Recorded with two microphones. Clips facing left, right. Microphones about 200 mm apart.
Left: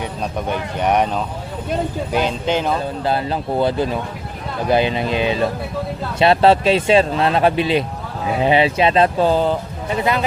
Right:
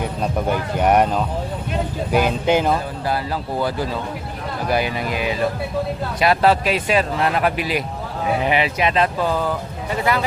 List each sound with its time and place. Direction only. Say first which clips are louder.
0.0 s speech: right 2 dB; 5° right (ahead or behind)
3.6 s speech: left 5 dB; 25° left (ahead or behind)